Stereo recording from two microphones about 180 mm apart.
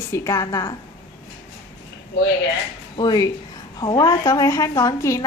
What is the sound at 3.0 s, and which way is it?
A woman's voice, 20° left (ahead or behind).